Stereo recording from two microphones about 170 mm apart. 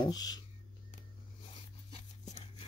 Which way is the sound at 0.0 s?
25° left (ahead or behind).